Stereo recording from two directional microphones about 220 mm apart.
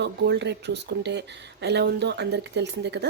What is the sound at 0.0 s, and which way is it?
Speech, 50° right (ahead or behind).